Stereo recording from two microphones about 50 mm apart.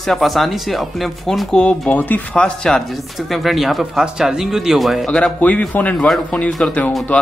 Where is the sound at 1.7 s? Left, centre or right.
Left.